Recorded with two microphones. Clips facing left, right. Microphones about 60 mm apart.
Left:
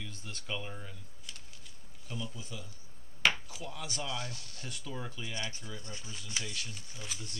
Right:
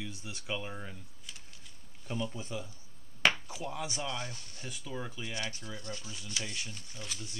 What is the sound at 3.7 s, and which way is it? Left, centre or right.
Speech, centre.